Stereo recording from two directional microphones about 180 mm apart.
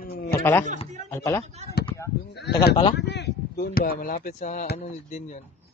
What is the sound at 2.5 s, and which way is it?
Speech, 70° left (ahead or behind).